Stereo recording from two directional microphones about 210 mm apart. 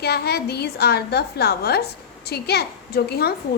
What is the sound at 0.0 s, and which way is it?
A child's voice, 50° left (ahead or behind).